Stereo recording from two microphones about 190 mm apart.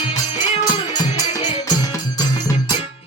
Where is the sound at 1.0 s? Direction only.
35° left (ahead or behind).